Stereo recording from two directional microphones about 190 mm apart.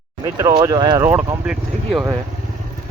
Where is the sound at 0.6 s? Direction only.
20° right (ahead or behind).